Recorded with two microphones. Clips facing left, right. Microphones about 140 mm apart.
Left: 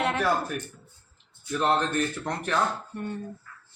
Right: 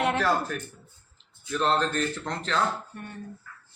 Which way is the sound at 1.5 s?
15° left (ahead or behind).